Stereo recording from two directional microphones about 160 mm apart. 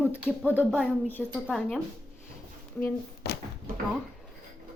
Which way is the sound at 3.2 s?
80° left.